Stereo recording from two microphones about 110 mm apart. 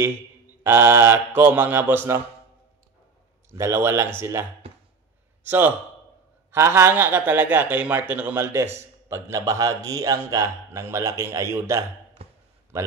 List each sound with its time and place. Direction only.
0.7 s a man's voice: 20° right (ahead or behind)
3.4 s a man's voice: 25° right (ahead or behind)
12.2 s a sound: 65° right (ahead or behind)
12.7 s a man's voice: 25° right (ahead or behind)